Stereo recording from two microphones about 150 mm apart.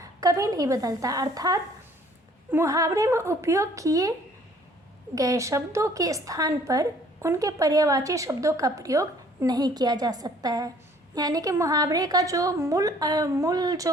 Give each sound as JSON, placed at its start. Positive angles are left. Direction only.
{"t": 0.0, "sound": "a woman's voice", "side_deg": -20}
{"t": 5.1, "sound": "a woman's voice", "side_deg": -20}